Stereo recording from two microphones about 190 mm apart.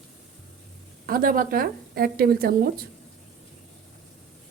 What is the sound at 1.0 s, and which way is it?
A woman's voice, 50° right (ahead or behind).